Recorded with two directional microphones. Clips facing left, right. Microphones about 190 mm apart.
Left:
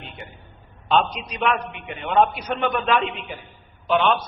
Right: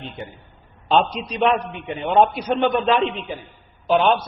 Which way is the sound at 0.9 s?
30° right (ahead or behind).